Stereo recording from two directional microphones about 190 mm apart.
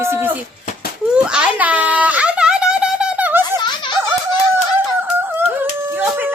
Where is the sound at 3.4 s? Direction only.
20° left (ahead or behind).